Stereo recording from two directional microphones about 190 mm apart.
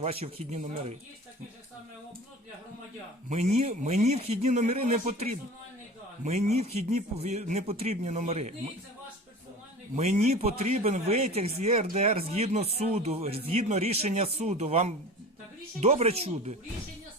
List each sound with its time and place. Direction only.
0.0 s a man's voice: 30° right (ahead or behind)
3.2 s a man's voice: 35° right (ahead or behind)
9.9 s a man's voice: 35° right (ahead or behind)